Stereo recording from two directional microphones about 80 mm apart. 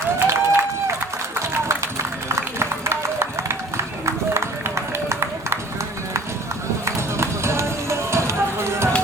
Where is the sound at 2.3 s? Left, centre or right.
Right.